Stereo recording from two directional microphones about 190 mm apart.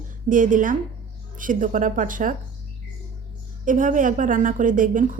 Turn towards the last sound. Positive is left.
turn(degrees=-45)  # may be behind; listen again after turning